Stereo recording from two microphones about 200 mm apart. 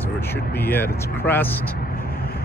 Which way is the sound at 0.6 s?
10° left (ahead or behind).